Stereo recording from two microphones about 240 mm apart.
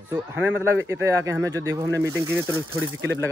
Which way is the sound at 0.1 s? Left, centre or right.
Centre.